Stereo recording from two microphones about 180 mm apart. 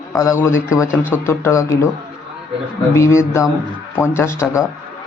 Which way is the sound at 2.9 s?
15° left (ahead or behind).